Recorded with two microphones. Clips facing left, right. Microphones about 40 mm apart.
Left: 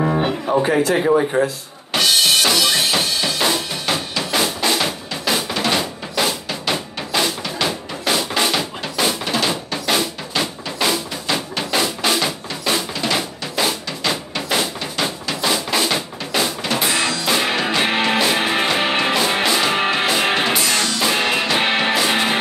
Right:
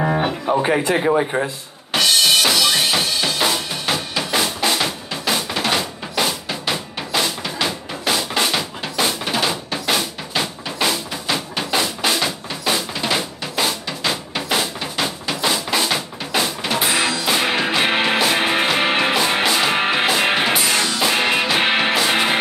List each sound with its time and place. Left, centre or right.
0.5 s a man's voice: centre
2.0 s drum: centre
11.5 s music: centre
13.0 s drum: centre
14.3 s a sound: centre